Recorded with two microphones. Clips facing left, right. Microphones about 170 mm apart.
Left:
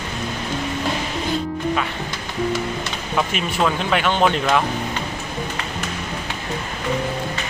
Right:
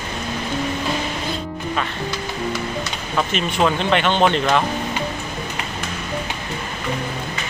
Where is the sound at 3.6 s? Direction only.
5° left (ahead or behind).